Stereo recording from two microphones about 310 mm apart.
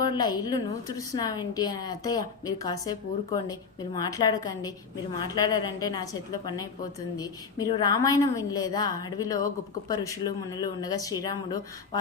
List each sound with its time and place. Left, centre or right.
0.1 s a woman's voice: centre
7.2 s a woman's voice: centre